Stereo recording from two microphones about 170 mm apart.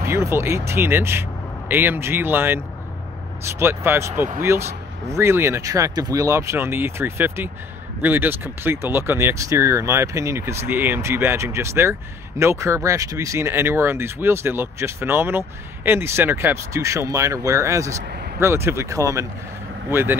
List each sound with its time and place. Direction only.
0.0 s speech: 15° right (ahead or behind)